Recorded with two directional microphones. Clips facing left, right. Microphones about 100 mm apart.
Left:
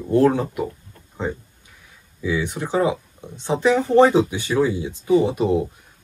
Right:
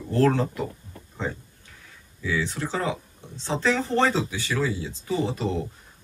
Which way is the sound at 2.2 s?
15° left (ahead or behind).